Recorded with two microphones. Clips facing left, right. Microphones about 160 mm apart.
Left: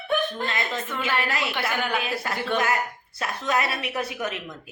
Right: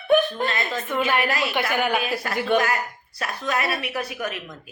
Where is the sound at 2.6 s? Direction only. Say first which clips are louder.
Even; 25° left (ahead or behind).